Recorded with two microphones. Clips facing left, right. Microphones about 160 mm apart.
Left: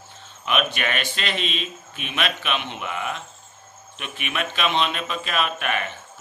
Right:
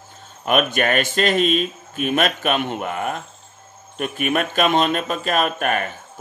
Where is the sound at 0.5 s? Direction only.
45° right (ahead or behind).